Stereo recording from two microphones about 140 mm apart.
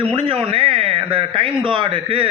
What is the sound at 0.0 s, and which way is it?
Speech, 40° right (ahead or behind).